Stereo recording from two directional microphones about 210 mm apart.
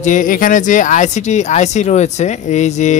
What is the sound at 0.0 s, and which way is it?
Speech, 40° left (ahead or behind).